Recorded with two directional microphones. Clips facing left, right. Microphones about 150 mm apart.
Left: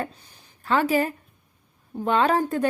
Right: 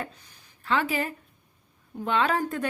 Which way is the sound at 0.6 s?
40° left (ahead or behind).